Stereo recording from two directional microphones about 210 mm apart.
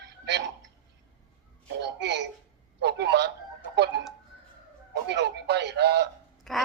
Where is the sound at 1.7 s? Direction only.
55° right (ahead or behind).